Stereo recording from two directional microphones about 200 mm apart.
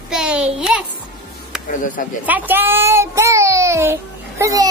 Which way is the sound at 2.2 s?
10° right (ahead or behind).